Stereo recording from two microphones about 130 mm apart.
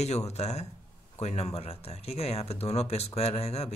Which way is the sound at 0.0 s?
55° left (ahead or behind).